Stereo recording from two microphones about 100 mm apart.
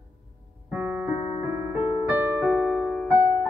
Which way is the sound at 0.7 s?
10° right (ahead or behind).